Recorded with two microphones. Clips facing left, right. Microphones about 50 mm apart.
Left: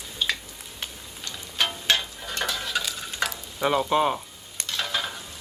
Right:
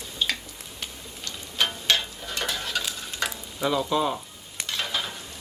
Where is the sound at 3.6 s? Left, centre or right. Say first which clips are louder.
Left 2 dB; left.